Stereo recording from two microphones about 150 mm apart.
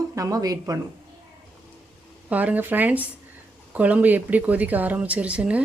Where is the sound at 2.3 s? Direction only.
10° right (ahead or behind).